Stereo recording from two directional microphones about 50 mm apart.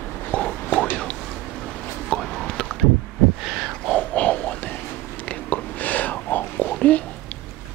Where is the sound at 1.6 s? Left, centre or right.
Centre.